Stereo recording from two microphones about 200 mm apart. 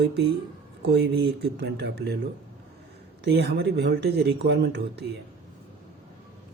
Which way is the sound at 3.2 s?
55° right (ahead or behind).